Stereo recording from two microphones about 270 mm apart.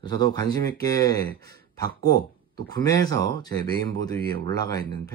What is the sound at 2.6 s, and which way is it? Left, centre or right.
Speech, centre.